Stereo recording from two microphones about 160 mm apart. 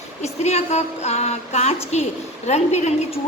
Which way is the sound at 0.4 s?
40° left (ahead or behind).